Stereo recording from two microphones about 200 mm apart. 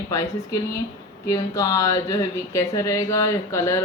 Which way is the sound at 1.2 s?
15° left (ahead or behind).